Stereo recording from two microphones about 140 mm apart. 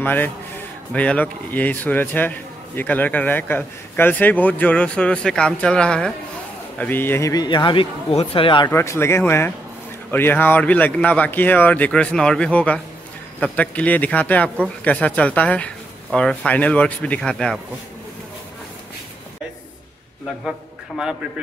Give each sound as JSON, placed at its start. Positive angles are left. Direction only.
{"t": 0.0, "sound": "a man's voice", "side_deg": 15}
{"t": 8.6, "sound": "speech", "side_deg": 20}